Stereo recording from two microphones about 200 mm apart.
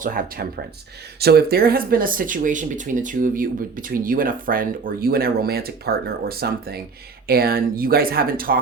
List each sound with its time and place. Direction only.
0.0 s speech: 45° right (ahead or behind)